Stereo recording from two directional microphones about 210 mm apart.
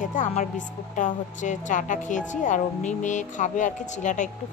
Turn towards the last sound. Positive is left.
turn(degrees=35)  # may be behind; listen again after turning